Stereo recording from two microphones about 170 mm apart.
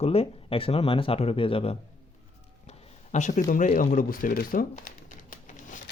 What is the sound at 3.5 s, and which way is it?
Speech, 55° left (ahead or behind).